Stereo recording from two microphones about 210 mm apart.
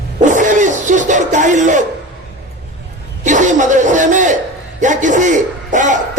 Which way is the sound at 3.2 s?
35° right (ahead or behind).